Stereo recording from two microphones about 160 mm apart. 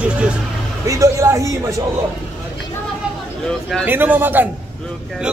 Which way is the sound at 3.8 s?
10° right (ahead or behind).